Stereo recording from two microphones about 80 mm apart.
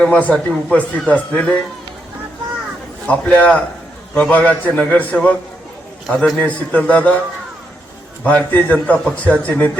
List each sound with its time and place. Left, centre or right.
0.0 s a man's voice: centre
3.1 s a man's voice: centre
6.1 s a man's voice: centre
6.4 s a man's voice: centre
8.2 s a man's voice: centre